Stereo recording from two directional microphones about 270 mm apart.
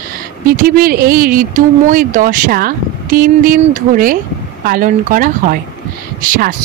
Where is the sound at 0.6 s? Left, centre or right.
Right.